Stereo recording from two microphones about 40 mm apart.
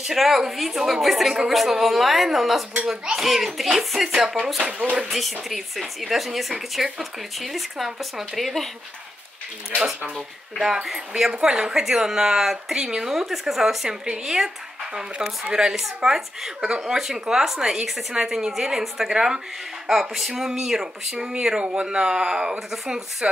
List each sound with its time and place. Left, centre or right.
0.0 s speech: centre
0.7 s speech: centre
10.6 s speech: centre
13.8 s speech: centre
15.6 s speech: centre
19.9 s speech: centre